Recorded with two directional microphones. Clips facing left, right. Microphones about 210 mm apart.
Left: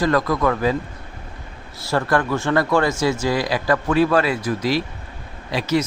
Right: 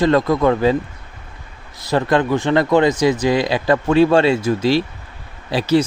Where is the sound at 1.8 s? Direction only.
20° right (ahead or behind).